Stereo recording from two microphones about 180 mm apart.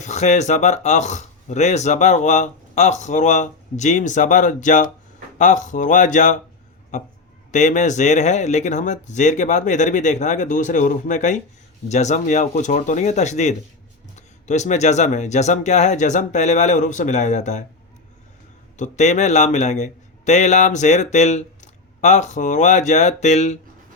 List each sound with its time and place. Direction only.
0.0 s speech: 40° left (ahead or behind)
7.5 s speech: 40° left (ahead or behind)
18.8 s speech: 40° left (ahead or behind)